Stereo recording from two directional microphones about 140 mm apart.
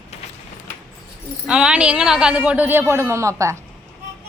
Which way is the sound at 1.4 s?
5° right (ahead or behind).